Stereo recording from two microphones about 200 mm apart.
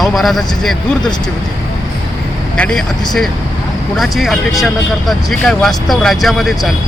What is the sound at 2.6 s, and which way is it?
Speech, 5° left (ahead or behind).